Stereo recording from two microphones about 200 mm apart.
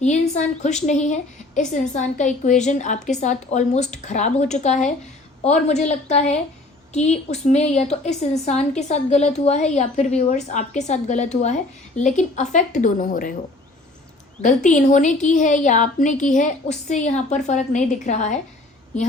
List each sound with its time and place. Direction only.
0.0 s a woman's voice: 35° left (ahead or behind)
14.4 s a woman's voice: 35° left (ahead or behind)